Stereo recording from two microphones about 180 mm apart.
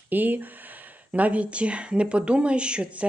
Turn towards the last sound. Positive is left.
turn(degrees=-5)  # may be behind; listen again after turning